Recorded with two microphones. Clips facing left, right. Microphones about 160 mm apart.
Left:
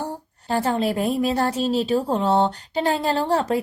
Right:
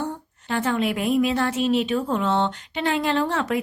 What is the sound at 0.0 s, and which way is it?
A woman's voice, 35° left (ahead or behind).